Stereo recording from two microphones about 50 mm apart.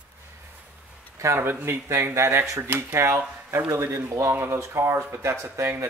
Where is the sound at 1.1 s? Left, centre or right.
Right.